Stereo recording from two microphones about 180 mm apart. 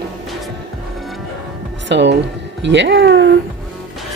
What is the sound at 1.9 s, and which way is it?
A man's voice, 75° right (ahead or behind).